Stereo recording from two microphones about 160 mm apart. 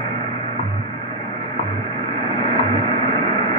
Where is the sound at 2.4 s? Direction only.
55° right (ahead or behind).